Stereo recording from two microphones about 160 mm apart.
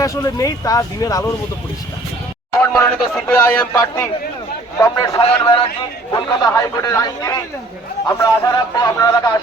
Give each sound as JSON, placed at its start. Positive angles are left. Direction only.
{"t": 0.0, "sound": "a man's voice", "side_deg": 20}
{"t": 2.5, "sound": "a man's voice", "side_deg": 15}